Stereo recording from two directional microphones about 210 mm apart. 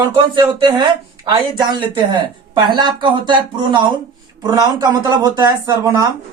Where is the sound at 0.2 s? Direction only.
20° right (ahead or behind).